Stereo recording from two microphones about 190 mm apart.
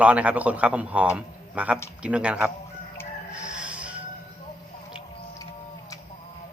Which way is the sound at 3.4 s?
5° right (ahead or behind).